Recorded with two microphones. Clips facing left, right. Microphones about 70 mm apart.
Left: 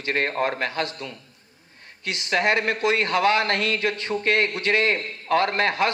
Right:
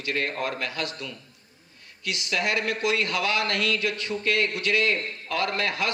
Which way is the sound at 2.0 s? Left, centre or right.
Left.